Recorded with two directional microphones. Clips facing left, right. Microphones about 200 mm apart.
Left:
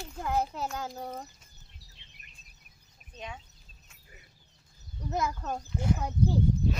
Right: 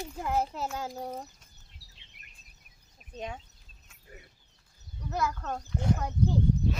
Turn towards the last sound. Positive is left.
turn(degrees=10)  # may be behind; listen again after turning